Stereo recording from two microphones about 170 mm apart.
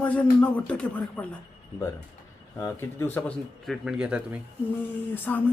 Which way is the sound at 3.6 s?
Centre (ahead or behind).